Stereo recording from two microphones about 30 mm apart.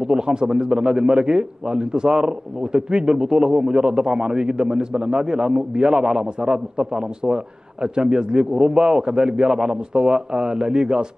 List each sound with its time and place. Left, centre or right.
0.0 s a man's voice: right